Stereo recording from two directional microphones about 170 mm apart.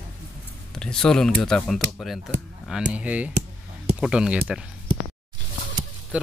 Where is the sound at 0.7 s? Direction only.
5° left (ahead or behind).